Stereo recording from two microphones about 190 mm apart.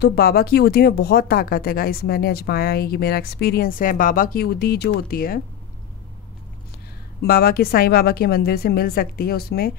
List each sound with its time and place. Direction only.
0.0 s speech: 55° left (ahead or behind)
7.2 s speech: 55° left (ahead or behind)